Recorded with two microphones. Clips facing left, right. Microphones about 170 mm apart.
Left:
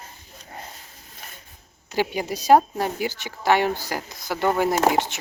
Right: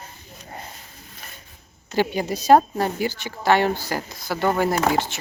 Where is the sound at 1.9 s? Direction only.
10° left (ahead or behind).